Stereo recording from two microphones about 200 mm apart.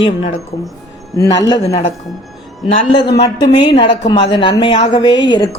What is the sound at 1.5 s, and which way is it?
A woman's voice, 25° left (ahead or behind).